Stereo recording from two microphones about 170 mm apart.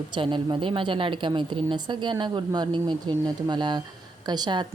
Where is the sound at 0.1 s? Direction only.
30° right (ahead or behind).